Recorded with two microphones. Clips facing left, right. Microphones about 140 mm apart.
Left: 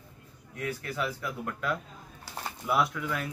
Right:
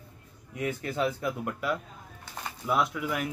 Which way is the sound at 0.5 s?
20° right (ahead or behind).